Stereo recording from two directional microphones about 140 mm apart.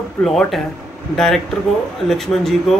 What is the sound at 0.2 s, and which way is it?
Speech, 5° left (ahead or behind).